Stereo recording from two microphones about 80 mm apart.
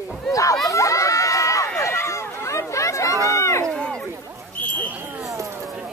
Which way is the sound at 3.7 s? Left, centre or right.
Centre.